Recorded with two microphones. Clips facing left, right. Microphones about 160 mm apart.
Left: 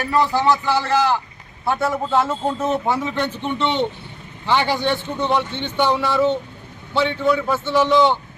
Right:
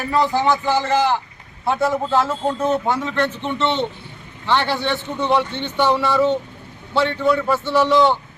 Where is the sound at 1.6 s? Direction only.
Centre (ahead or behind).